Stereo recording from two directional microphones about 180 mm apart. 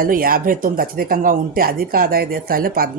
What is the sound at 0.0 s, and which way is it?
Speech, 50° right (ahead or behind).